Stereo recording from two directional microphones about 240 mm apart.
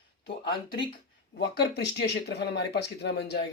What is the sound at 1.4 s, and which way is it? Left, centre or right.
Speech, left.